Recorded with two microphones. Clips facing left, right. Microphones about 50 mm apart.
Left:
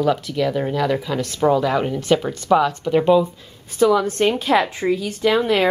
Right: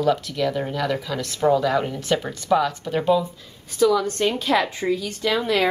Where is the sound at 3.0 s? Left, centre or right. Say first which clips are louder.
Left 5 dB; left.